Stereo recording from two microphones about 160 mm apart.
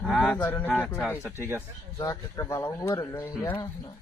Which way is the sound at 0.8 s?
10° left (ahead or behind).